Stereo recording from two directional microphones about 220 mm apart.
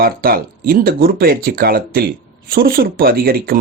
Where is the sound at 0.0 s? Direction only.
40° right (ahead or behind).